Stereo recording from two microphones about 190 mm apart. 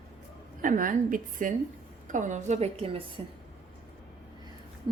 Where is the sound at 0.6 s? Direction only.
45° right (ahead or behind); by 3.0 s 30° right (ahead or behind).